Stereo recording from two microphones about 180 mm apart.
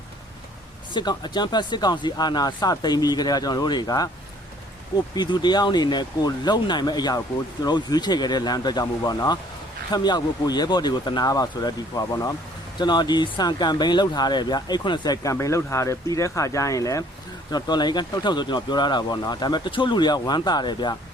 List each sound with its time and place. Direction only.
0.9 s speech: 25° left (ahead or behind)
5.1 s speech: 25° left (ahead or behind)